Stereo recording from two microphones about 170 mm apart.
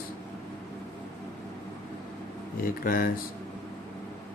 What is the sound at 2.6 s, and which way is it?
Speech, 55° left (ahead or behind).